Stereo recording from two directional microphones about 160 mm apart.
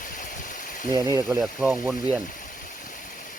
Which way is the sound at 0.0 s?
55° left (ahead or behind).